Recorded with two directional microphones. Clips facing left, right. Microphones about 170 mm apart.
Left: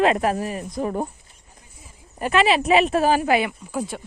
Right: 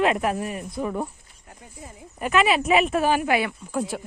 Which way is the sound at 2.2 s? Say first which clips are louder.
Left 2 dB; 30° left (ahead or behind).